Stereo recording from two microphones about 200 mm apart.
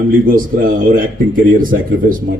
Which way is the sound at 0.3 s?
45° right (ahead or behind).